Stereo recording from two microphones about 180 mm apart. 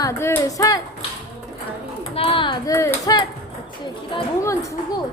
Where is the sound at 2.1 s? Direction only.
30° left (ahead or behind).